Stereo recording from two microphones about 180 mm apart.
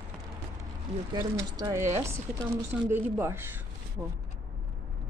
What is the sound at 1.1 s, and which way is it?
Speech, 20° right (ahead or behind).